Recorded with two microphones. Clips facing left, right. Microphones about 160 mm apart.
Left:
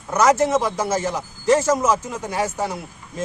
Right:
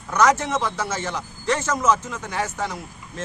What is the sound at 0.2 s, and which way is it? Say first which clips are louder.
Speech: left 3 dB; 10° left (ahead or behind).